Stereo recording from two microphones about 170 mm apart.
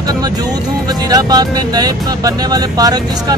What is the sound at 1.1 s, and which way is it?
Music, 20° right (ahead or behind).